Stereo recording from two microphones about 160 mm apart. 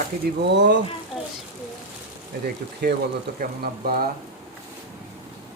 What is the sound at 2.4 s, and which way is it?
Speech, 80° right.